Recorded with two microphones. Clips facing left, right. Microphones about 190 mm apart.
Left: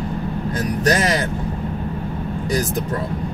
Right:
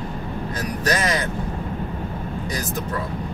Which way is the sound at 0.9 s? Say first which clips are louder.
Left 4 dB; 35° left (ahead or behind).